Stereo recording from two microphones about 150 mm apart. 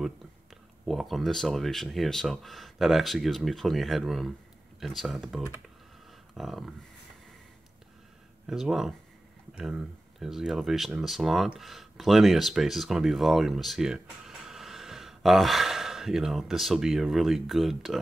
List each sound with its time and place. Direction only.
0.8 s speech: centre (ahead or behind)
8.5 s speech: centre (ahead or behind)